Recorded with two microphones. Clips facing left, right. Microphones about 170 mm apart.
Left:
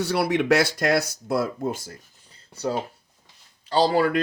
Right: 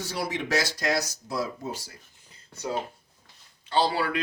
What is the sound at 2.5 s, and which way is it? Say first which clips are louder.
Speech: left 4 dB; 35° left (ahead or behind).